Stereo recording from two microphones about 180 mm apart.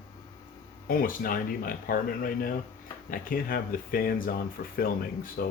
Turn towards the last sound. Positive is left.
turn(degrees=55)  # may be behind; listen again after turning